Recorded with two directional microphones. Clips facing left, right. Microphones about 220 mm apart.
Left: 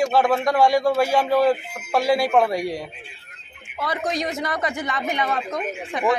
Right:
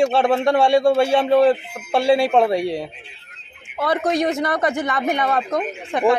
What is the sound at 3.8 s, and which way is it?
Speech, 55° right (ahead or behind).